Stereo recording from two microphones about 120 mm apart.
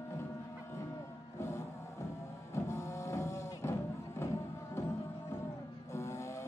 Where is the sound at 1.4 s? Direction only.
20° left (ahead or behind).